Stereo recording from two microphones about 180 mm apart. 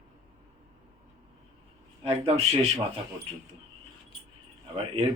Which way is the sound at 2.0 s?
35° right (ahead or behind).